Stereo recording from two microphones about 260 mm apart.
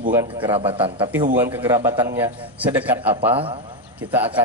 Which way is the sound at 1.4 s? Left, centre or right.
Centre.